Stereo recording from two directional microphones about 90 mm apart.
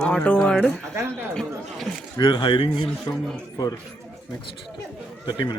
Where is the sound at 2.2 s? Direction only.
65° left (ahead or behind); by 2.9 s 80° left.